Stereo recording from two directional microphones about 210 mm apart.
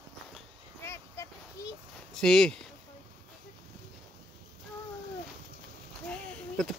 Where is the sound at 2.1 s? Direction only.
5° left (ahead or behind).